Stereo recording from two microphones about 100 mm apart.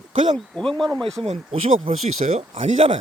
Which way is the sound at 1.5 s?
85° right.